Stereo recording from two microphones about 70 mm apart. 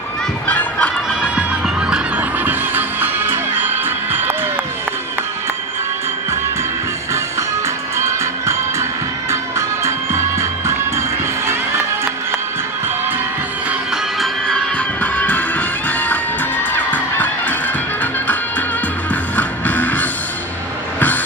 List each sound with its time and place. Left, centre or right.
0.4 s music: left
2.1 s music: right
7.9 s music: right
14.8 s music: left